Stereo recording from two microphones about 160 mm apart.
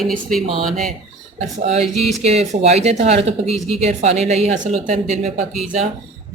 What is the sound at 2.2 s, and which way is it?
A woman's voice, 40° right (ahead or behind).